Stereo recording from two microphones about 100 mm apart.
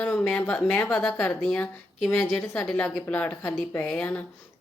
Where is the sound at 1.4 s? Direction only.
5° left (ahead or behind).